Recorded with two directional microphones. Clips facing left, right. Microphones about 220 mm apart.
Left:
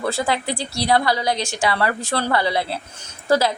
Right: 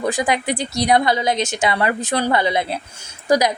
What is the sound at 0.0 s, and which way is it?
A woman's voice, 15° right (ahead or behind).